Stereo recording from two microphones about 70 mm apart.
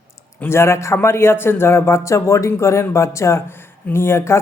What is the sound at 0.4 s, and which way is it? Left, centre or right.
Speech, left.